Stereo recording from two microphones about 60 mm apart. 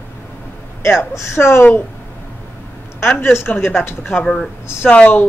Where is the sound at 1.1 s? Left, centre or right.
Left.